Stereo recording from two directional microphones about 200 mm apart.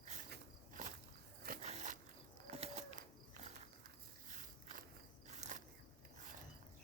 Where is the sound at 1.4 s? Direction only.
45° right (ahead or behind).